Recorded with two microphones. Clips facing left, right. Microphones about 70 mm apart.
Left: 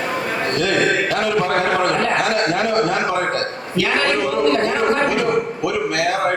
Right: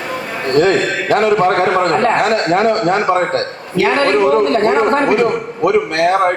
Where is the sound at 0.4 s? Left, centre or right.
Right.